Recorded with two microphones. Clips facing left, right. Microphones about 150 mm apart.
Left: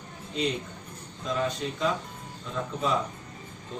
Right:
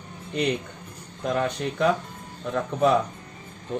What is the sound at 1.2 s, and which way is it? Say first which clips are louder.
Speech: right 4 dB; 55° right (ahead or behind).